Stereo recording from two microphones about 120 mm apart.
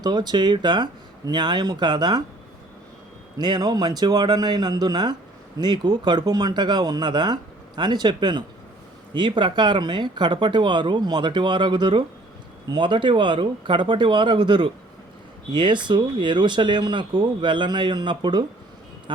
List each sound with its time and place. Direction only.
0.0 s speech: 40° right (ahead or behind)
3.3 s speech: 35° right (ahead or behind)